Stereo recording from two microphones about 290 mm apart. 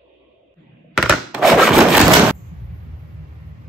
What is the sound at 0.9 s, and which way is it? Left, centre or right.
Thunk, centre.